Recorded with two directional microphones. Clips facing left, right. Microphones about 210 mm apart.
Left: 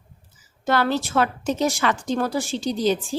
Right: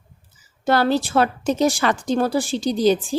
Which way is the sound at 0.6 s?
35° right (ahead or behind).